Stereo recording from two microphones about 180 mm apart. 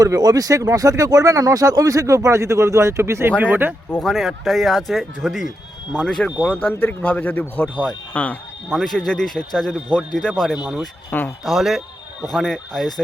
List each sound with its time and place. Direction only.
0.0 s speech: 20° right (ahead or behind)
3.9 s speech: centre (ahead or behind)
11.4 s speech: centre (ahead or behind)